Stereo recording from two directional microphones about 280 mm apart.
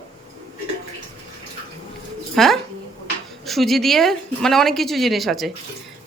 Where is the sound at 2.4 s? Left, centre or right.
Centre.